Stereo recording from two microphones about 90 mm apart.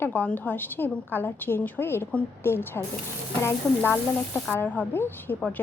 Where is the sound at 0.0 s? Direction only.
20° left (ahead or behind).